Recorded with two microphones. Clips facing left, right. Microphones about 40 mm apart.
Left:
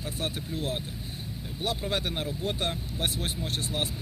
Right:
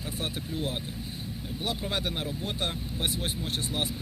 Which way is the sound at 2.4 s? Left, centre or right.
Right.